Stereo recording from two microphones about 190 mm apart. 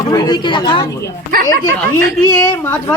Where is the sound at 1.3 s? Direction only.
50° right (ahead or behind).